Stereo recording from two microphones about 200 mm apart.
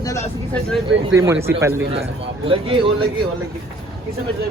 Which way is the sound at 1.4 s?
15° right (ahead or behind).